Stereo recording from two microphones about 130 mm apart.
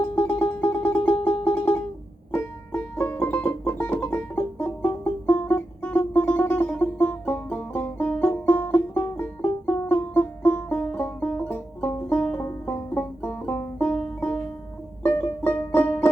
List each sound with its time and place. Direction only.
0.0 s music: 15° left (ahead or behind)
2.3 s banjo: 15° left (ahead or behind)
3.8 s music: 15° left (ahead or behind)